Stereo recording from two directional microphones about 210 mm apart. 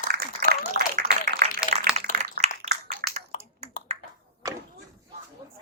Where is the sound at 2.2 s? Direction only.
35° right (ahead or behind).